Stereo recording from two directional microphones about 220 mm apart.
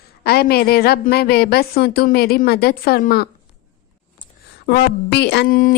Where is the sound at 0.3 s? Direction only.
45° left (ahead or behind).